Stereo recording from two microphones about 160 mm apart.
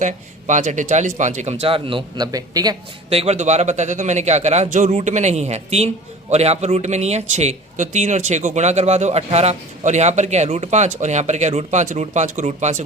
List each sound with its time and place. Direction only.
0.0 s speech: 50° right (ahead or behind); by 2.7 s 25° right (ahead or behind)
3.1 s speech: 40° right (ahead or behind)